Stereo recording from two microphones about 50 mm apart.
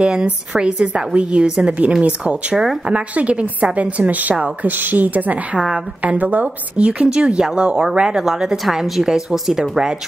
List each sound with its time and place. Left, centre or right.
0.0 s speech: centre
2.5 s speech: centre
2.9 s a woman's voice: right; by 9.9 s centre